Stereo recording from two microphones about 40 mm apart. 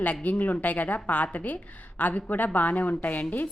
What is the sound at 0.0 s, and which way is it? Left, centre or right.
A woman's voice, left.